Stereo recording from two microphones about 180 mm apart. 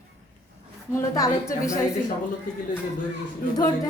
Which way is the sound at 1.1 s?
20° left (ahead or behind).